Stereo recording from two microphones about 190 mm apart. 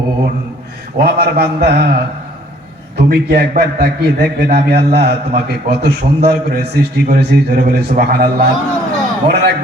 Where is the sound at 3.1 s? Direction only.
55° right (ahead or behind).